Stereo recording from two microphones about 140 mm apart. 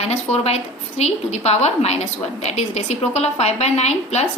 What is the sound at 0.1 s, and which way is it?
A woman's voice, 50° left (ahead or behind).